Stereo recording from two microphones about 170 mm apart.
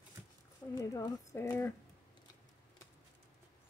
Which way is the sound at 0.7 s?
20° left (ahead or behind).